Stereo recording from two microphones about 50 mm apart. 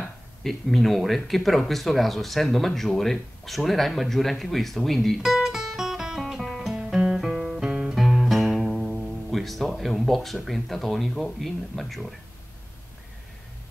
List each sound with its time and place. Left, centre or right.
0.4 s speech: centre
5.2 s music: centre
6.7 s music: centre
7.2 s music: centre
9.3 s speech: centre